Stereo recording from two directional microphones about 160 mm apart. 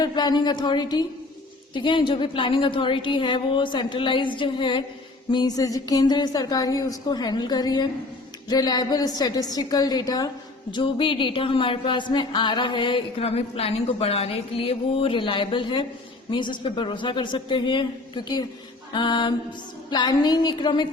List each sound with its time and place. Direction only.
0.0 s speech: 25° left (ahead or behind)